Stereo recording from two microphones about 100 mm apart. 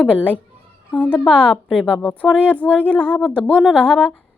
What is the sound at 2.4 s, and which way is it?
Speech, 15° left (ahead or behind).